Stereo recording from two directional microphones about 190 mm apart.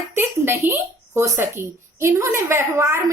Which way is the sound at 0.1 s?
10° right (ahead or behind).